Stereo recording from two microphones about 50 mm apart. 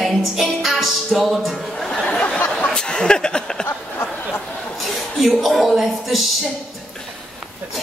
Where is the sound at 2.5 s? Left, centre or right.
Centre.